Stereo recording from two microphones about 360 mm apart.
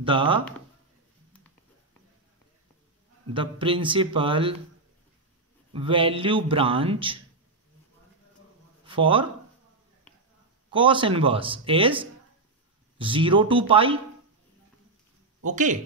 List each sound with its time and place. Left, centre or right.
0.0 s a man's voice: centre
3.3 s a man's voice: centre
5.7 s a man's voice: centre
8.8 s speech: centre
10.7 s a man's voice: centre
15.5 s speech: right